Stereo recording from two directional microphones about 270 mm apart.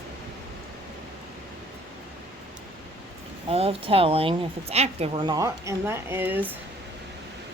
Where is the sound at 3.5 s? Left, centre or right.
Right.